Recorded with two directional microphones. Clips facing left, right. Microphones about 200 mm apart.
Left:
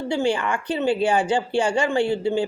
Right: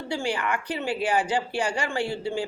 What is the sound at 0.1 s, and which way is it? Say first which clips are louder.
Speech: left 5 dB; 25° left (ahead or behind).